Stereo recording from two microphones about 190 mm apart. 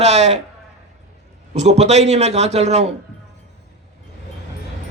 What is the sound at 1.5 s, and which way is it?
A man's voice, 35° right (ahead or behind).